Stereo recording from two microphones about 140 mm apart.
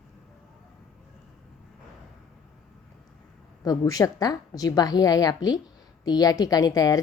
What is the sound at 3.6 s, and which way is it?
A woman's voice, 25° left (ahead or behind).